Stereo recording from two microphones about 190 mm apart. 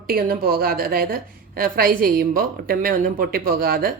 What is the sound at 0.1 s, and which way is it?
A woman's voice, 55° right (ahead or behind).